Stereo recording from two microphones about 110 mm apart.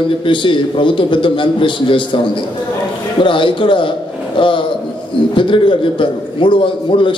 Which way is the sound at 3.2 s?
50° left (ahead or behind).